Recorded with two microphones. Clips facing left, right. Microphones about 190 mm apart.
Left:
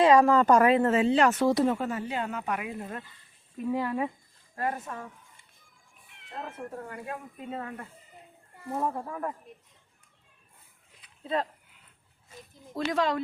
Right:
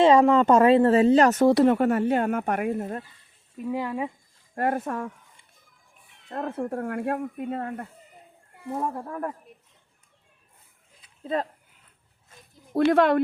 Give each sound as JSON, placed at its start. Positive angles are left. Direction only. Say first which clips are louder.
{"t": 0.0, "sound": "speech", "louder": "right 3 dB", "side_deg": -25}
{"t": 1.5, "sound": "speech", "louder": "right 6 dB", "side_deg": -65}
{"t": 3.7, "sound": "speech", "louder": "even", "side_deg": -10}
{"t": 4.5, "sound": "speech", "louder": "right 7 dB", "side_deg": -60}
{"t": 6.2, "sound": "speech", "louder": "right 9 dB", "side_deg": -60}
{"t": 12.7, "sound": "speech", "louder": "right 9 dB", "side_deg": -60}